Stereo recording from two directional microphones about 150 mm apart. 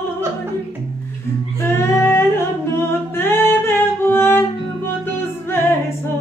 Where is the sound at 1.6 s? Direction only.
20° left (ahead or behind).